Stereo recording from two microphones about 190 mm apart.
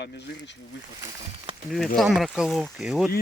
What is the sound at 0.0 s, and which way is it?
Speech, 60° left (ahead or behind).